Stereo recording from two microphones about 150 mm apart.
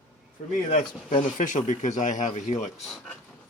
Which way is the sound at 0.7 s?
55° left (ahead or behind).